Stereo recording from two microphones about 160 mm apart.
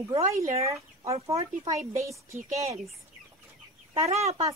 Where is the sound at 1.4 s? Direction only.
20° right (ahead or behind).